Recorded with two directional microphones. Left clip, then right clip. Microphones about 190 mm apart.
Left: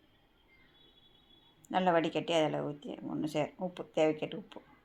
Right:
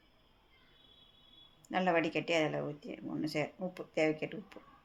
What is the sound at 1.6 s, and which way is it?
Speech, 15° left (ahead or behind).